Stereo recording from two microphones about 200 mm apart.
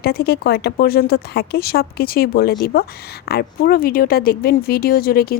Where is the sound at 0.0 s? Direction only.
50° left (ahead or behind).